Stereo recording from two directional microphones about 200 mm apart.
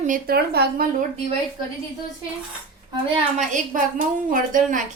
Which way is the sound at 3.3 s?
40° right (ahead or behind).